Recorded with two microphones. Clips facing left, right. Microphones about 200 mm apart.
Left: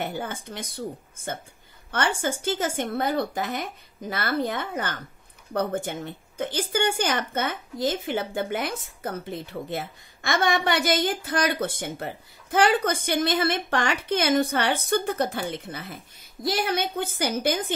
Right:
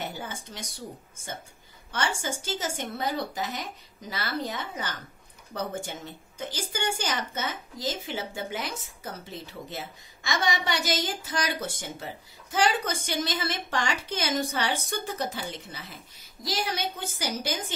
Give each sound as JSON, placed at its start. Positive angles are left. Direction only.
{"t": 0.0, "sound": "a woman's voice", "side_deg": 55}